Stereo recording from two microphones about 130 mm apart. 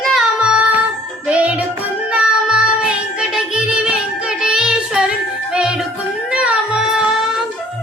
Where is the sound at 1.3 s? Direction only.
10° right (ahead or behind).